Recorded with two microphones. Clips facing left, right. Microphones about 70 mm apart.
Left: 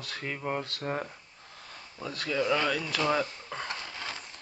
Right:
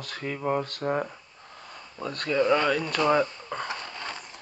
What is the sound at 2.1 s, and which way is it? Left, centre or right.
Speech, right.